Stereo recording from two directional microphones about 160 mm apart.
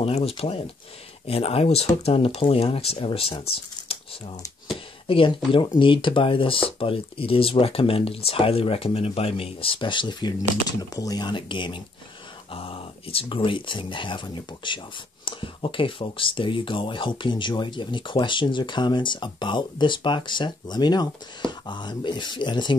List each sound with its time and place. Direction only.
0.0 s speech: 35° left (ahead or behind)
4.6 s a sound: 35° left (ahead or behind)
5.8 s speech: 30° left (ahead or behind)